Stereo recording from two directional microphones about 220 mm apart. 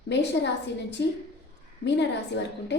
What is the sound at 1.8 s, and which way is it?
Speech, 50° left (ahead or behind).